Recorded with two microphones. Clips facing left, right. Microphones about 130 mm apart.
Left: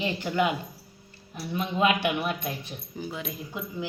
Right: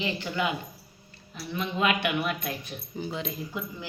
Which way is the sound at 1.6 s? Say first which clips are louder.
Left 2 dB; 35° left (ahead or behind).